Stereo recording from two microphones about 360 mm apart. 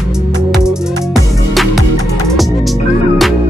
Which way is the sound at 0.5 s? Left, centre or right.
Centre.